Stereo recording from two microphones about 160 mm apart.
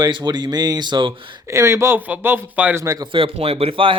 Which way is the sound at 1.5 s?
15° right (ahead or behind).